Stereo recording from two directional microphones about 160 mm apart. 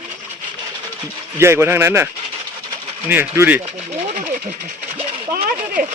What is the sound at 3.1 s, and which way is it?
Speech, 10° right (ahead or behind).